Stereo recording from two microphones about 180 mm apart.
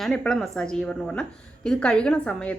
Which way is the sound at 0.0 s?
5° left (ahead or behind).